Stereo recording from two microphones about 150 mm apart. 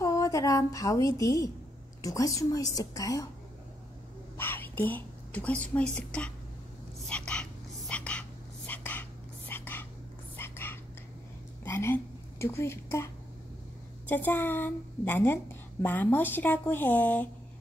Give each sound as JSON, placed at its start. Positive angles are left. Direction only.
{"t": 0.0, "sound": "a woman's voice", "side_deg": 20}
{"t": 4.4, "sound": "a woman's voice", "side_deg": 15}
{"t": 7.1, "sound": "whispering", "side_deg": 5}
{"t": 11.6, "sound": "a sound", "side_deg": 15}
{"t": 14.0, "sound": "a woman's voice", "side_deg": 10}